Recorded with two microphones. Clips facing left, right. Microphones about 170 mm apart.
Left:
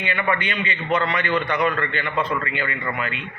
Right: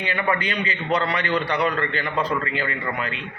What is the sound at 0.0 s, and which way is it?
Speech, 35° right (ahead or behind).